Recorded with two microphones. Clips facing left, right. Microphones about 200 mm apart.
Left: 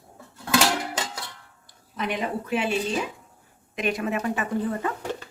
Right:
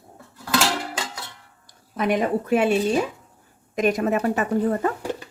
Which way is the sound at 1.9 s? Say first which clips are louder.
Right 7 dB; 50° right (ahead or behind).